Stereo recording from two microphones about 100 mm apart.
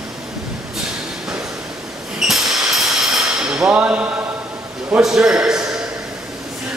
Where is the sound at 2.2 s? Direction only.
5° right (ahead or behind).